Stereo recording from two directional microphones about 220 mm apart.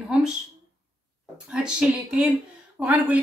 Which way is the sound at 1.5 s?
5° right (ahead or behind).